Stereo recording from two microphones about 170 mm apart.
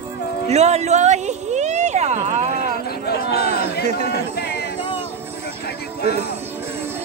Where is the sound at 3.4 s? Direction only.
40° right (ahead or behind).